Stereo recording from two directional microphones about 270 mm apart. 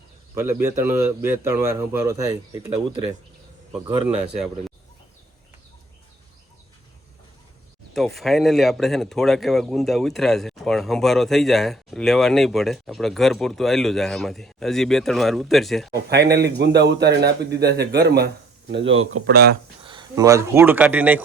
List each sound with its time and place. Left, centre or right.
0.3 s a man's voice: centre
7.9 s speech: centre
16.0 s speech: right
19.3 s speech: right
19.8 s speech: centre